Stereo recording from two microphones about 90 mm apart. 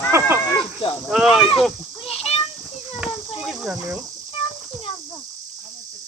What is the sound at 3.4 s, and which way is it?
Cricket, 5° right (ahead or behind).